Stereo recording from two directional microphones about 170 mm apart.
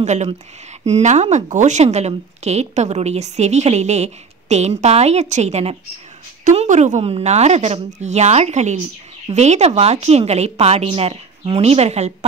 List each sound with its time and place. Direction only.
0.0 s speech: 40° right (ahead or behind)